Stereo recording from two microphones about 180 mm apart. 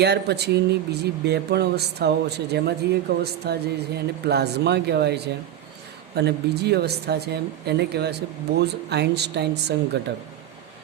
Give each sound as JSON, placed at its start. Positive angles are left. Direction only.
{"t": 0.0, "sound": "speech", "side_deg": -65}